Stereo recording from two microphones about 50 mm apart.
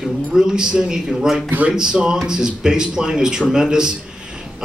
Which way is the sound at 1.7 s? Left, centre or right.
Centre.